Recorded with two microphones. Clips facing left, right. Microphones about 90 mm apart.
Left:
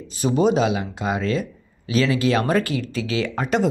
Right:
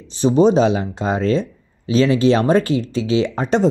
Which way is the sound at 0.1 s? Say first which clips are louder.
Right 5 dB; 25° right (ahead or behind).